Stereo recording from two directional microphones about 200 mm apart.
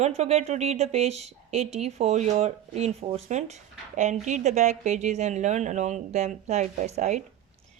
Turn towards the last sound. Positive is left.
turn(degrees=-35)  # may be behind; listen again after turning